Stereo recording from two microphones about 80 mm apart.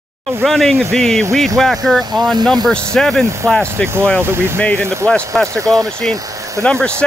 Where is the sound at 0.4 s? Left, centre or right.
Centre.